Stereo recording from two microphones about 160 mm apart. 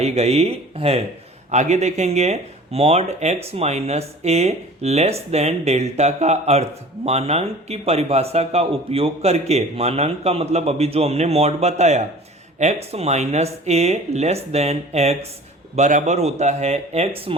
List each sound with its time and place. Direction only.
0.0 s speech: 40° right (ahead or behind)